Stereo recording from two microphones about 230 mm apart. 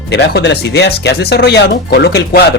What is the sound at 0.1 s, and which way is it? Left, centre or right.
Speech, left.